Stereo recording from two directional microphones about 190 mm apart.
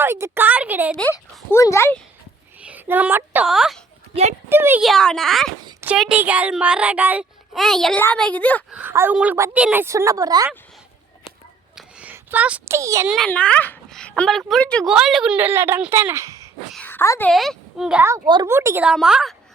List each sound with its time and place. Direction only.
0.0 s a woman's voice: 10° right (ahead or behind)
0.9 s speech: 10° left (ahead or behind)
2.6 s a child's voice: 10° right (ahead or behind)
4.1 s speech: 35° right (ahead or behind)
4.4 s a woman's voice: 10° right (ahead or behind)
4.8 s a child's voice: centre (ahead or behind)
8.7 s a woman's voice: 10° right (ahead or behind)
11.8 s a sound: 5° right (ahead or behind)
13.1 s a child's voice: centre (ahead or behind); by 16.5 s 15° right (ahead or behind)
16.7 s a child's voice: 10° left (ahead or behind)
17.3 s a child's voice: centre (ahead or behind)